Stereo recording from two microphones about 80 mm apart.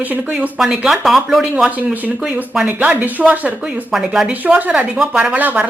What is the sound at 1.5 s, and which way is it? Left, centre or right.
Speech, centre.